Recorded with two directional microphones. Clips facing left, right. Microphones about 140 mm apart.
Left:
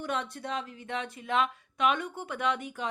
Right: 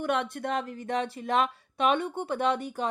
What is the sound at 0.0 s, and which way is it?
Speech, 60° right (ahead or behind).